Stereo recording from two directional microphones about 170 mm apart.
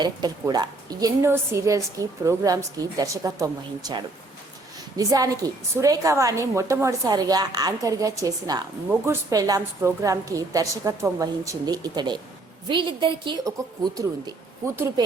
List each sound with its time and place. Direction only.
0.0 s a woman's voice: 25° right (ahead or behind)